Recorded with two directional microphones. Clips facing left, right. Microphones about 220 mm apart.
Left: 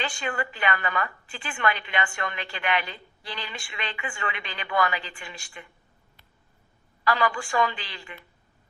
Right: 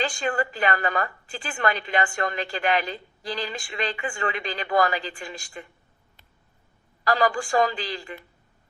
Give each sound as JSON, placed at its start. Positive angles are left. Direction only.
{"t": 0.0, "sound": "a woman's voice", "side_deg": -40}
{"t": 7.0, "sound": "a woman's voice", "side_deg": -40}